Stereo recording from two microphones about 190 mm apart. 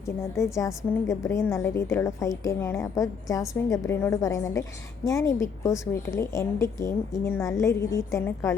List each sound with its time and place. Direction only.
0.2 s a woman's voice: 15° left (ahead or behind)